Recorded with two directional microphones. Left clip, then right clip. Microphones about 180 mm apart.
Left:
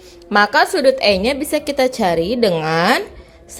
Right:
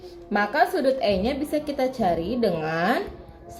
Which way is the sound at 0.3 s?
35° left (ahead or behind).